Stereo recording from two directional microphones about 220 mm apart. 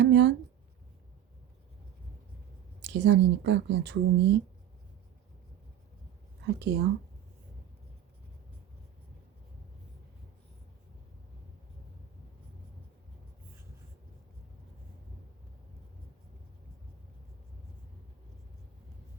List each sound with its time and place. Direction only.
0.0 s a sound: 55° right (ahead or behind)
2.8 s speech: 50° right (ahead or behind)
6.4 s speech: 50° right (ahead or behind)